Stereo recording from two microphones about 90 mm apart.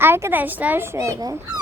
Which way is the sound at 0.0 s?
25° right (ahead or behind).